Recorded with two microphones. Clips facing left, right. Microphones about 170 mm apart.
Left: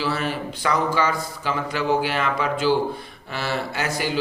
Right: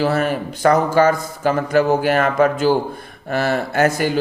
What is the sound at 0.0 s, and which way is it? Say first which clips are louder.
A man's voice: right 7 dB; 50° right (ahead or behind).